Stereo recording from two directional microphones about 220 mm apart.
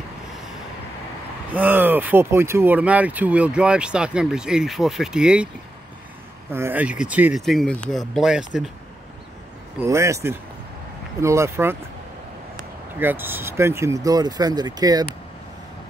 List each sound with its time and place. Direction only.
1.5 s speech: 10° right (ahead or behind)
6.5 s speech: 10° right (ahead or behind)
9.8 s speech: 15° right (ahead or behind)
13.0 s speech: 10° right (ahead or behind)